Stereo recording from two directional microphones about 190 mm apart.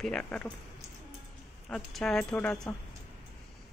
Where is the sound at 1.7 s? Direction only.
Centre (ahead or behind).